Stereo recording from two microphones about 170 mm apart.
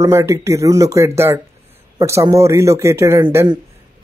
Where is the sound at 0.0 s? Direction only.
15° right (ahead or behind).